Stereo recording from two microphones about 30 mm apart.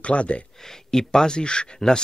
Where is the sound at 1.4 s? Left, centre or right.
Left.